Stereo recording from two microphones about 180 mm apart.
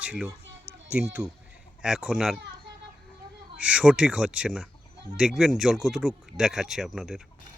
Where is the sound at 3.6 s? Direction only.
5° right (ahead or behind).